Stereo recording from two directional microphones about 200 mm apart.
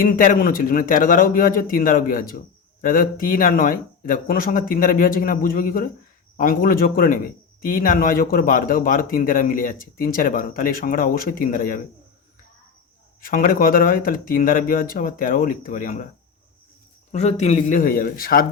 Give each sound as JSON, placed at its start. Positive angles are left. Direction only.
{"t": 0.0, "sound": "speech", "side_deg": 45}
{"t": 13.2, "sound": "speech", "side_deg": 45}
{"t": 17.1, "sound": "a man's voice", "side_deg": 35}